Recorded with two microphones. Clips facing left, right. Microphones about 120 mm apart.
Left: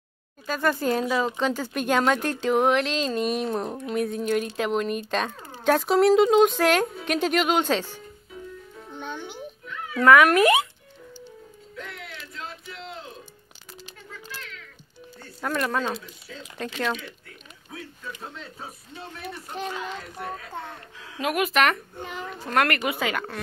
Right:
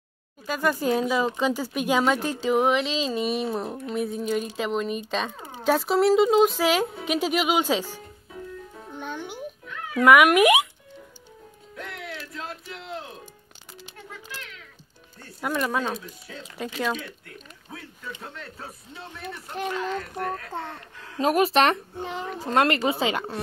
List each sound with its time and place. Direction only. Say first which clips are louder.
0.5 s speech: even; 10° right (ahead or behind)
9.9 s speech: even; 15° right (ahead or behind)
15.4 s speech: even; 10° right (ahead or behind)
19.9 s speech: right 5 dB; 50° right (ahead or behind)
21.2 s a child's voice: right 3 dB; 35° right (ahead or behind)